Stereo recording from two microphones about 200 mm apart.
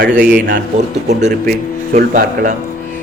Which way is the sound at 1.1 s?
55° right (ahead or behind).